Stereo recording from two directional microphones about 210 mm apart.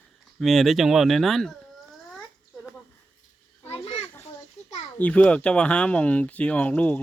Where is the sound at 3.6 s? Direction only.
30° left (ahead or behind).